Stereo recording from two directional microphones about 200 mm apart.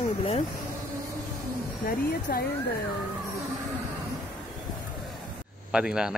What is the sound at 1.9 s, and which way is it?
Speech, 45° left (ahead or behind).